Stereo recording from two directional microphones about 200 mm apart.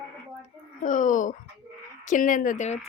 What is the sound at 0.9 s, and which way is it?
A woman's voice, 40° left (ahead or behind).